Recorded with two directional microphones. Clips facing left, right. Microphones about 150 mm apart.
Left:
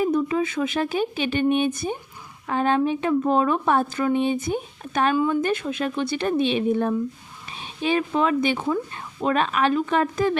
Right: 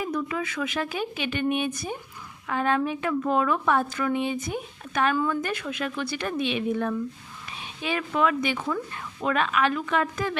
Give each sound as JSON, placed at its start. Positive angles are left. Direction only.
{"t": 0.0, "sound": "a woman's voice", "side_deg": 30}